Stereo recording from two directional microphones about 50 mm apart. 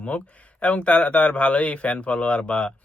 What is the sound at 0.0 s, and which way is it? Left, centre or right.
Speech, left.